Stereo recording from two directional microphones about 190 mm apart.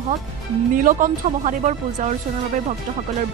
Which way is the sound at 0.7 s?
45° right (ahead or behind).